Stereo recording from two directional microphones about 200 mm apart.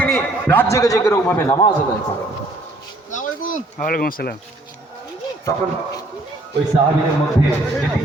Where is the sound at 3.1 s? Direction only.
40° left (ahead or behind).